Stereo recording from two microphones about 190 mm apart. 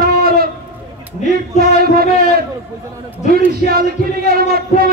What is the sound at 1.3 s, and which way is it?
Speech, 55° right (ahead or behind).